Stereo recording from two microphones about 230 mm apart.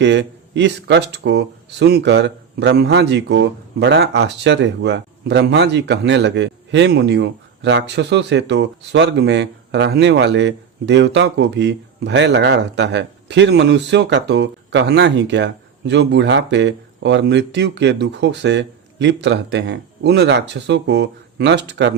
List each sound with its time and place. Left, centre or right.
0.0 s speech: right